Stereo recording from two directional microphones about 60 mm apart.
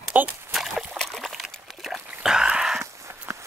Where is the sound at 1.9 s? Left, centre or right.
Centre.